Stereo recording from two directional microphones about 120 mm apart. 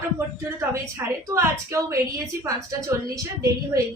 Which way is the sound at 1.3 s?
25° right (ahead or behind).